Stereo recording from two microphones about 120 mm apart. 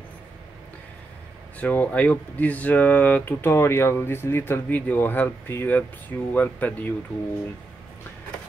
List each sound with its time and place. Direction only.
1.6 s speech: 15° left (ahead or behind)